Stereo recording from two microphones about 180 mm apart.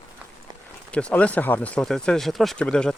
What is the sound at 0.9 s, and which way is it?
Speech, 5° left (ahead or behind).